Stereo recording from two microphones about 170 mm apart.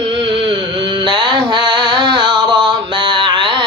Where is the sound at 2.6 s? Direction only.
30° right (ahead or behind).